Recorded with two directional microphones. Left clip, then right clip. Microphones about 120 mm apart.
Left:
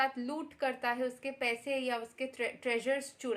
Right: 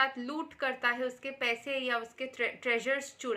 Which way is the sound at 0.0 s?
20° left (ahead or behind).